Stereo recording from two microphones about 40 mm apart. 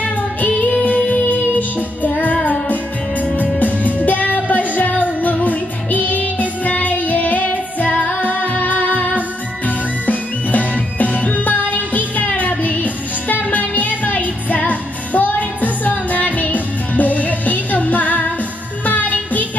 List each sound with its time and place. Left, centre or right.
0.0 s music: left
2.0 s music: left
3.5 s music: left